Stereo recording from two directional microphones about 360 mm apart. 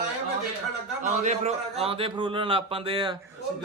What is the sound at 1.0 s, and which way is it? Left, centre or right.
A man's voice, centre.